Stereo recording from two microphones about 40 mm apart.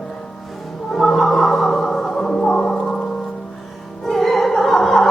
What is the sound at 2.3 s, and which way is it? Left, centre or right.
Music, left.